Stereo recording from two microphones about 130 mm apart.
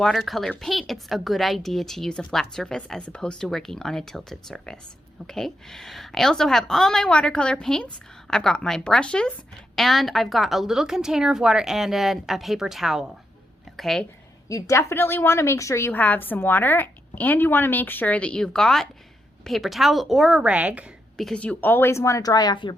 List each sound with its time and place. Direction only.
0.0 s a woman's voice: centre (ahead or behind)
14.5 s a woman's voice: 20° left (ahead or behind); by 20.9 s 10° right (ahead or behind)
21.2 s speech: 5° left (ahead or behind); by 22.7 s 35° left (ahead or behind)